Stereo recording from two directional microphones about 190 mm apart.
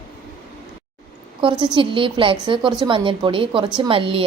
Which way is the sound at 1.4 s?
25° right (ahead or behind).